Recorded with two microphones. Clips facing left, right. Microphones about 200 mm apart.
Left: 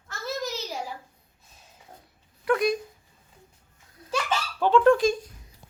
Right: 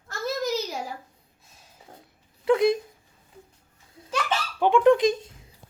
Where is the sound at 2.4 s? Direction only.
25° right (ahead or behind).